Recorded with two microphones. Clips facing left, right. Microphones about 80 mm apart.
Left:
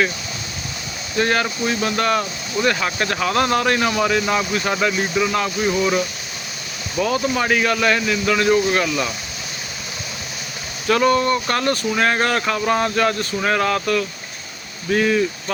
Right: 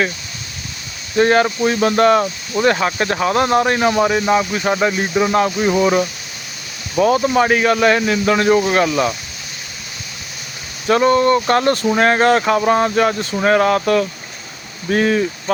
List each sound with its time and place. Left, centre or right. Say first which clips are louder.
1.1 s speech: right 6 dB; right
6.9 s speech: right 6 dB; right
10.8 s speech: right 4 dB; right